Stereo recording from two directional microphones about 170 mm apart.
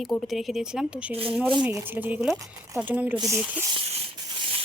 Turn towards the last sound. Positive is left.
turn(degrees=-35)  # may be behind; listen again after turning